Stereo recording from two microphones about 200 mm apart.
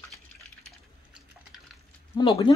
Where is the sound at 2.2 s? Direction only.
25° left (ahead or behind).